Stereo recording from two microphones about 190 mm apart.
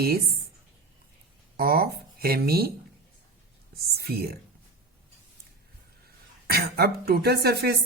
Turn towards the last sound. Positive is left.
turn(degrees=-55)  # may be behind; listen again after turning